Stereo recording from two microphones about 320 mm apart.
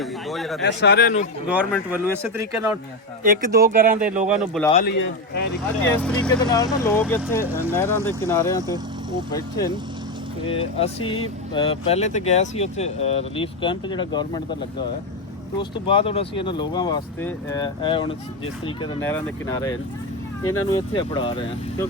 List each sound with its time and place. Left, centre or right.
0.0 s speech: centre
0.6 s speech: left
1.5 s speech: centre
3.2 s speech: right
4.4 s speech: centre
4.7 s speech: left
6.0 s speech: centre
10.4 s speech: centre
15.5 s speech: centre
20.4 s speech: left
20.7 s speech: centre